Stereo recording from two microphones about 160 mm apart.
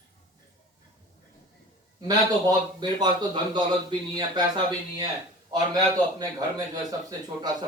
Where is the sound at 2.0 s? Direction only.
25° right (ahead or behind).